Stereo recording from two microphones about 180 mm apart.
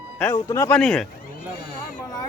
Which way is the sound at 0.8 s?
5° left (ahead or behind).